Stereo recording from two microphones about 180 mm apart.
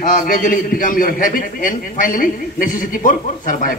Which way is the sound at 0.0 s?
45° left (ahead or behind).